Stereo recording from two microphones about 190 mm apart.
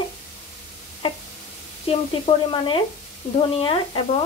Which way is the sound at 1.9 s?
30° left (ahead or behind).